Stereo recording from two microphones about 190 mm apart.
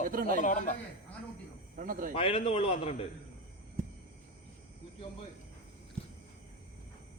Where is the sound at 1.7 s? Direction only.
45° right (ahead or behind).